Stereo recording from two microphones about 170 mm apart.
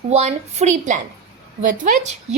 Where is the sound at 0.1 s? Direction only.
40° right (ahead or behind).